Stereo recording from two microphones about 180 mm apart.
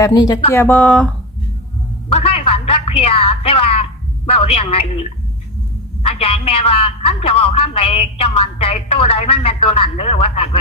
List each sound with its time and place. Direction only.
0.0 s speech: 20° left (ahead or behind)
2.0 s a sound: 30° left (ahead or behind)
4.3 s a man's voice: 35° left (ahead or behind)